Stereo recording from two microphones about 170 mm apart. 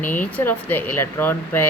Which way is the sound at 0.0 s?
10° left (ahead or behind).